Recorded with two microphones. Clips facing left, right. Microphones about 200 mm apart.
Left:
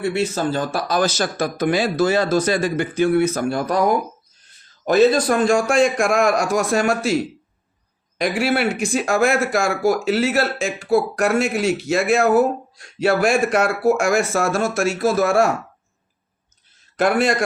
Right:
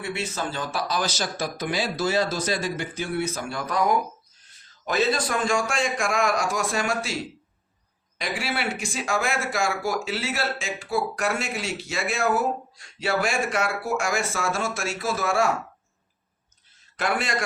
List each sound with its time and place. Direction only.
0.3 s speech: 40° left (ahead or behind)
3.7 s a man's voice: 40° left (ahead or behind)
8.2 s a man's voice: 55° left (ahead or behind)
17.0 s speech: 55° left (ahead or behind)